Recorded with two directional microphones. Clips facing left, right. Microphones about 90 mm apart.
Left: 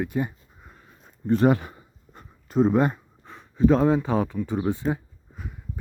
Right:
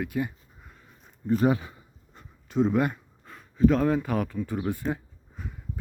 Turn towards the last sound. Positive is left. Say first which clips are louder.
# left 2 dB
turn(degrees=10)  # may be behind; listen again after turning